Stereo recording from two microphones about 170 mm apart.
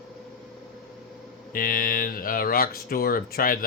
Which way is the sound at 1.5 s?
55° left (ahead or behind).